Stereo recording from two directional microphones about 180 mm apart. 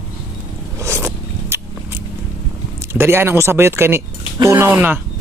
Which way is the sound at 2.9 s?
15° right (ahead or behind).